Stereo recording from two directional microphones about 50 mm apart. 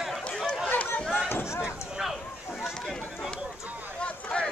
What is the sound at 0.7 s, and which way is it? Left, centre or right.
Run, left.